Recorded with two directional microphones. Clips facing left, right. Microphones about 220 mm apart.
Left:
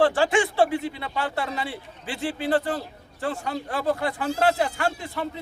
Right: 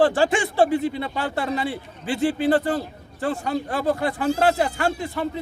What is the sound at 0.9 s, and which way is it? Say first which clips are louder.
Speech: right 3 dB; 45° right (ahead or behind).